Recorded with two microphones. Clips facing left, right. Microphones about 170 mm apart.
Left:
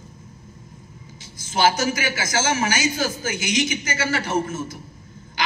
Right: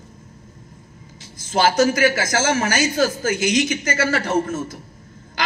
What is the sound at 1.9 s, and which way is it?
A man's voice, 60° right (ahead or behind).